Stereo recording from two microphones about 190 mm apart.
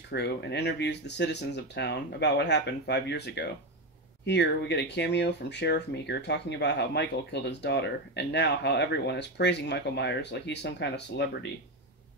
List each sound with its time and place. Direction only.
0.1 s speech: 60° left (ahead or behind)